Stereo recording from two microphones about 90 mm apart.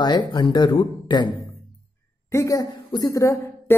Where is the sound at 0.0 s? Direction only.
55° left (ahead or behind).